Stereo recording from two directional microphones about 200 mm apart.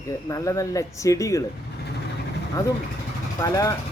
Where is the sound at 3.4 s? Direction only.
15° left (ahead or behind).